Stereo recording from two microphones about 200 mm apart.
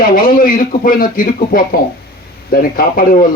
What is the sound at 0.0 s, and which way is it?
A man's voice, 45° left (ahead or behind).